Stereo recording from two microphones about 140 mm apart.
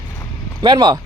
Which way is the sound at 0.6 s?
30° right (ahead or behind).